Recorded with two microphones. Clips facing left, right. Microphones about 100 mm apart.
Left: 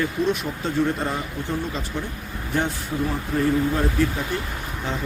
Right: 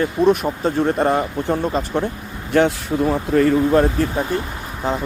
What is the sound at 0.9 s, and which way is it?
Speech, 60° right (ahead or behind).